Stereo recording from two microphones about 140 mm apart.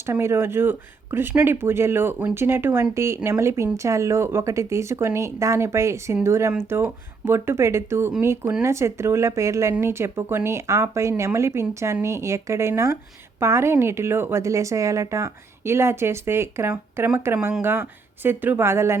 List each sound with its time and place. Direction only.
0.0 s a woman's voice: 20° right (ahead or behind)